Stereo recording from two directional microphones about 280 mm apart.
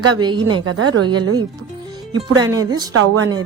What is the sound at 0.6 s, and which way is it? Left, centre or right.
Speech, right.